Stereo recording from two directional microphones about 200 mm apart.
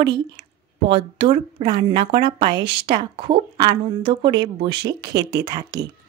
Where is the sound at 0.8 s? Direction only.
30° right (ahead or behind).